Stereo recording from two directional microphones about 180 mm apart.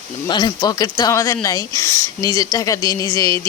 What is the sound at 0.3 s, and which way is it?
A woman's voice, 25° left (ahead or behind).